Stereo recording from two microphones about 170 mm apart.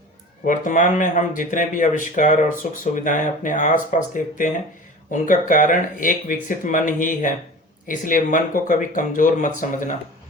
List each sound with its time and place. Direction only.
0.4 s speech: 50° left (ahead or behind)